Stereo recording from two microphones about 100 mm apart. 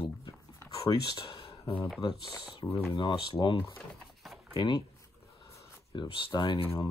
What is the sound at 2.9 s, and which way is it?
Speech, 50° left (ahead or behind).